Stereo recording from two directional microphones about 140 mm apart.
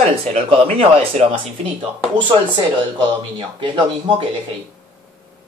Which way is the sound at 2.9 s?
35° right (ahead or behind).